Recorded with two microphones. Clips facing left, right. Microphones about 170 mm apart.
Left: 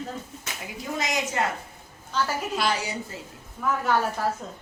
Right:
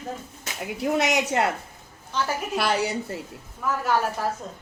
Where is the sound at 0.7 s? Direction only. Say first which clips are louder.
Right 7 dB; 70° right (ahead or behind).